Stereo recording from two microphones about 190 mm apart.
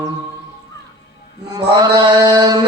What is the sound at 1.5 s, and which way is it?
Mantra, 20° right (ahead or behind).